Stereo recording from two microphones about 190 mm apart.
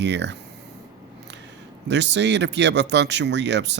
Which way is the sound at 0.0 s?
65° right (ahead or behind).